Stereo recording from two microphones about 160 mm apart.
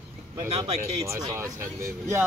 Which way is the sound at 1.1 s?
20° right (ahead or behind).